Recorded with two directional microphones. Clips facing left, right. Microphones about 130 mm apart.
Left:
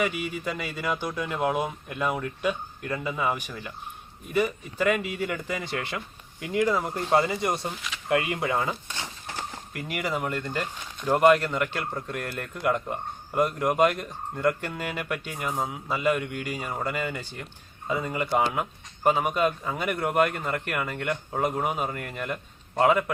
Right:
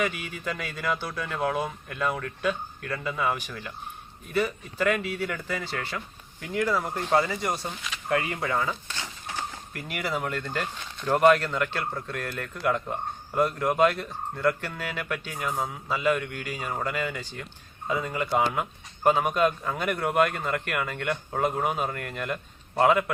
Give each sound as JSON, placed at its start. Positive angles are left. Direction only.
{"t": 0.0, "sound": "speech", "side_deg": 10}
{"t": 7.1, "sound": "speech", "side_deg": 25}
{"t": 7.6, "sound": "a man's voice", "side_deg": 0}
{"t": 8.1, "sound": "speech", "side_deg": 20}
{"t": 9.7, "sound": "speech", "side_deg": 10}
{"t": 18.3, "sound": "a man's voice", "side_deg": 0}